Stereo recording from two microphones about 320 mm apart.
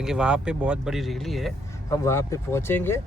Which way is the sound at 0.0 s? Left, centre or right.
Centre.